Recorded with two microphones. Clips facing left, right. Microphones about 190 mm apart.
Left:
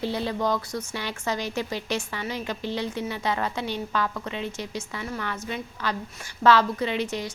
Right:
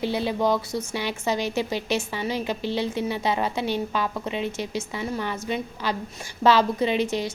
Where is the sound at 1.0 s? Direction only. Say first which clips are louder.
Right 4 dB; 20° right (ahead or behind).